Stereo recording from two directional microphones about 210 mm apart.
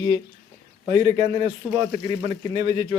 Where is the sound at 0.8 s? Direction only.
30° right (ahead or behind).